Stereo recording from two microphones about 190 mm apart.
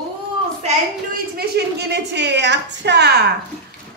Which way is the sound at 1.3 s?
55° right (ahead or behind).